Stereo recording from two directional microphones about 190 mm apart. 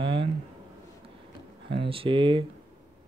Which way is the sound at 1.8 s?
30° right (ahead or behind).